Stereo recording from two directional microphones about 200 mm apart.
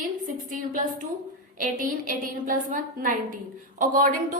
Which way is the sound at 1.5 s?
40° right (ahead or behind).